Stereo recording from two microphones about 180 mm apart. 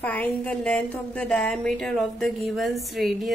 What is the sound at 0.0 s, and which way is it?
A woman's voice, 10° left (ahead or behind).